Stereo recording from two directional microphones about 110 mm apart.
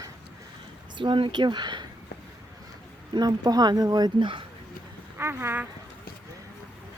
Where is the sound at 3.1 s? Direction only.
35° right (ahead or behind).